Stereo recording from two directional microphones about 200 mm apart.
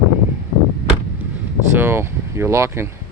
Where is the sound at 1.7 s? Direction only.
10° right (ahead or behind).